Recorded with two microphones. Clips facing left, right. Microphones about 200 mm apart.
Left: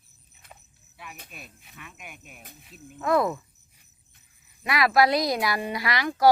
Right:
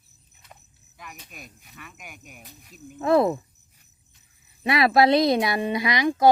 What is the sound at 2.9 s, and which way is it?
Speech, 30° right (ahead or behind).